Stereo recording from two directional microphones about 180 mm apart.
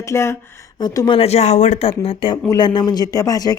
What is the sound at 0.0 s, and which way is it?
A woman's voice, 15° left (ahead or behind).